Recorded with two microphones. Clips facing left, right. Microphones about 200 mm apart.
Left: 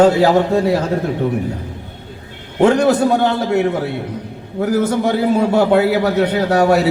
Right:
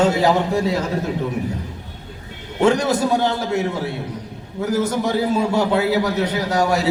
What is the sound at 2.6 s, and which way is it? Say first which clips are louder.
A man's voice: left 4 dB; 65° left (ahead or behind).